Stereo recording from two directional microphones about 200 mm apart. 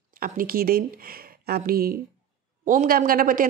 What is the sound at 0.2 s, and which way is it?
Speech, 45° right (ahead or behind).